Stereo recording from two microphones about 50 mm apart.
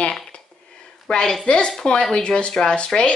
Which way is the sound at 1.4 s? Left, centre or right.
Centre.